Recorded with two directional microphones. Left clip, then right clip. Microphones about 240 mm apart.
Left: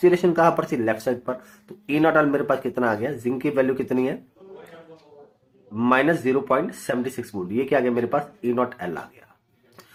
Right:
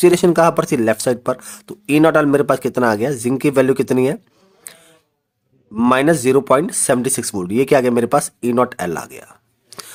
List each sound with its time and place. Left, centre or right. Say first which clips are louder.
0.0 s speech: right 6 dB; right
5.7 s speech: right 5 dB; right